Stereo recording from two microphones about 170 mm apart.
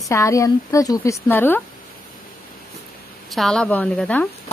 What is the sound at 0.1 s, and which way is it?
A woman's voice, 15° left (ahead or behind).